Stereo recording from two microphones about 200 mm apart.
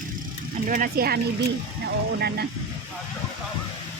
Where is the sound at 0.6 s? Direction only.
45° right (ahead or behind).